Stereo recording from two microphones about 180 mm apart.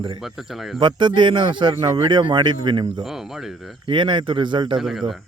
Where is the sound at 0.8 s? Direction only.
25° right (ahead or behind).